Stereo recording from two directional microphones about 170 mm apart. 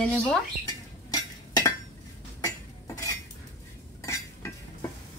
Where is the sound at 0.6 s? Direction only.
20° left (ahead or behind).